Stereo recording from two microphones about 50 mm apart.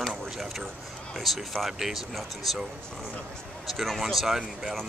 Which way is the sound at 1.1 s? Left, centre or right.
Centre.